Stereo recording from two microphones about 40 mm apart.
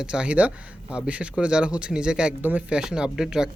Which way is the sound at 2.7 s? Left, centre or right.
Centre.